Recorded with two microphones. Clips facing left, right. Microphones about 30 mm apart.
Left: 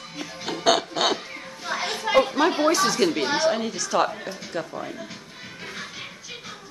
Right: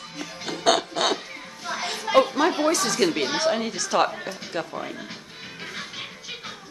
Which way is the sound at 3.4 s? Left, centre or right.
Centre.